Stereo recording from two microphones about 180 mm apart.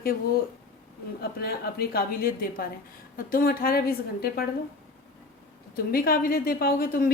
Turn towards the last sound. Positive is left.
turn(degrees=55)  # may be behind; listen again after turning